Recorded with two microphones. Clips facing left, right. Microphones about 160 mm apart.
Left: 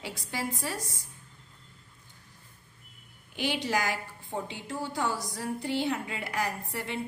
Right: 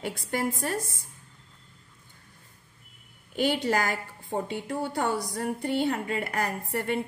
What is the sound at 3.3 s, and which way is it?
A woman's voice, 50° right (ahead or behind).